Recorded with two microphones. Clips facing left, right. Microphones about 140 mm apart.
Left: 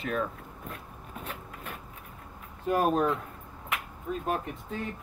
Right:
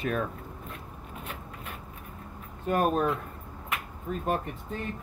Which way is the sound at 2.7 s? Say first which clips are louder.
Even; 5° left (ahead or behind).